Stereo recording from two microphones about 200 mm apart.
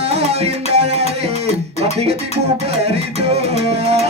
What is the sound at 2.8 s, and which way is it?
Music, 30° right (ahead or behind).